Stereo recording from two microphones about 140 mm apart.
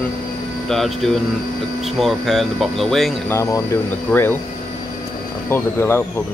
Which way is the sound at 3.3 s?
20° left (ahead or behind).